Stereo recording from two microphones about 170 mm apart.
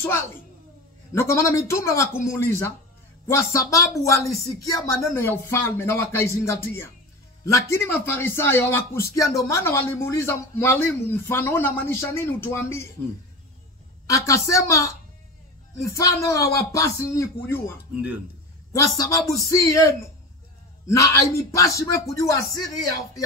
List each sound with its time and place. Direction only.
0.0 s speech: 15° left (ahead or behind)
14.0 s a man's voice: 20° left (ahead or behind)